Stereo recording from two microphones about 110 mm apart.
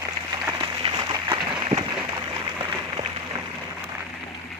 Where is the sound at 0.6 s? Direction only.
45° right (ahead or behind).